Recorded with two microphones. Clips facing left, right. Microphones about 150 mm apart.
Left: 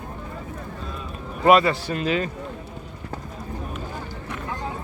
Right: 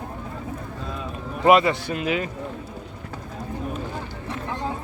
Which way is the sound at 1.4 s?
20° right (ahead or behind).